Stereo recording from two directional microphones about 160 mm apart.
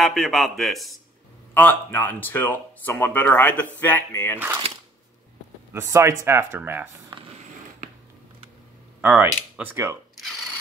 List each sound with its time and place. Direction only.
0.0 s a man's voice: centre (ahead or behind)
1.5 s speech: 10° left (ahead or behind)
5.7 s speech: 15° right (ahead or behind)
9.0 s speech: 10° right (ahead or behind)